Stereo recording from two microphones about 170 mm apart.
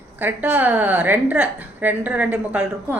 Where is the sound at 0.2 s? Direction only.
10° right (ahead or behind).